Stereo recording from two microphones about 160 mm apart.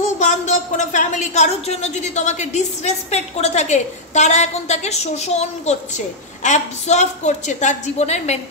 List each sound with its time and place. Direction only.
0.2 s a woman's voice: 50° left (ahead or behind)